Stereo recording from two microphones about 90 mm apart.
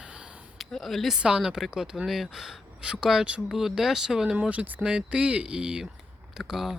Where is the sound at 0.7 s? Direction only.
Centre (ahead or behind).